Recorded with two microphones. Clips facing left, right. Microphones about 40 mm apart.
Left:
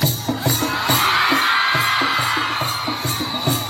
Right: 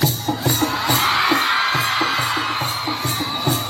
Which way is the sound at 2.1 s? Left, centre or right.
Centre.